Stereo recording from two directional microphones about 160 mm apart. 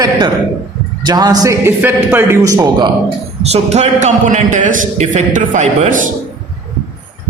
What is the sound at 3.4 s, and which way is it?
A man's voice, 45° right (ahead or behind).